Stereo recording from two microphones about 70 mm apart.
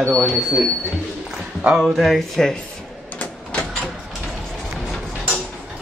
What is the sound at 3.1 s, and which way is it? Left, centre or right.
Printer, left.